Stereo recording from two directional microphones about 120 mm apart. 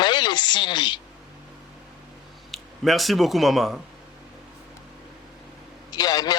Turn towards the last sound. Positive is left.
turn(degrees=30)  # may be behind; listen again after turning